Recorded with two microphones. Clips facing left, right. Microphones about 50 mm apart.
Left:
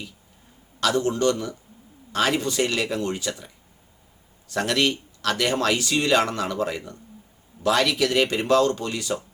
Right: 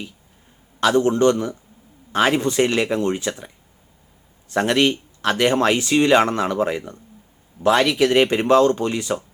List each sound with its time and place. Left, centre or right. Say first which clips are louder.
0.8 s speech: right 6 dB; right